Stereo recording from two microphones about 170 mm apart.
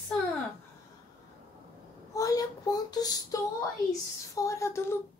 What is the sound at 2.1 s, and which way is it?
A child's voice, 20° left (ahead or behind).